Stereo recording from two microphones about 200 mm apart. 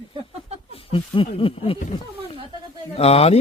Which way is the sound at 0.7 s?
25° left (ahead or behind).